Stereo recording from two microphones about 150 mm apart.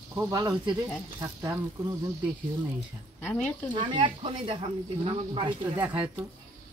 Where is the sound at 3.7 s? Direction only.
30° right (ahead or behind).